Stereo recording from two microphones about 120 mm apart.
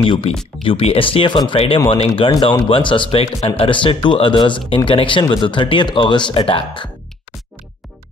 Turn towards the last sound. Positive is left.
turn(degrees=50)  # may be behind; listen again after turning